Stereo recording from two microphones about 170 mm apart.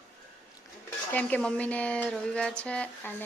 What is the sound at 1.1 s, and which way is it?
Speech, 5° left (ahead or behind).